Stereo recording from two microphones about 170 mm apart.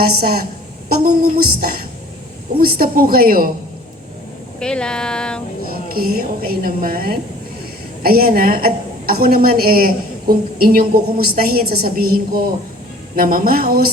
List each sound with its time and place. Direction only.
0.0 s a woman's voice: 65° right (ahead or behind)
4.6 s speech: 5° left (ahead or behind)
5.6 s a woman's voice: 60° right (ahead or behind)